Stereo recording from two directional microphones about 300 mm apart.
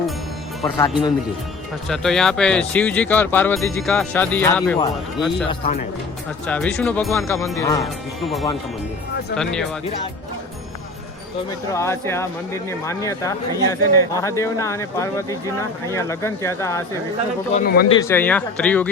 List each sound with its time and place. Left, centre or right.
1.9 s speech: centre
8.2 s speech: centre
11.7 s speech: centre
17.5 s speech: left
17.8 s speech: centre